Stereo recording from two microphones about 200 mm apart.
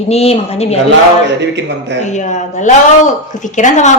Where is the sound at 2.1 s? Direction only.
40° left (ahead or behind).